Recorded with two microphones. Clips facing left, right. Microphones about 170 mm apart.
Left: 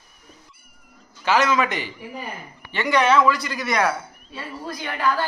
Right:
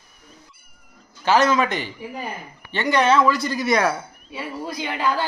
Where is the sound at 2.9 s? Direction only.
30° right (ahead or behind).